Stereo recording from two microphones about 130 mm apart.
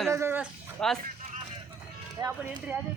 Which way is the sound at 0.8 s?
5° left (ahead or behind).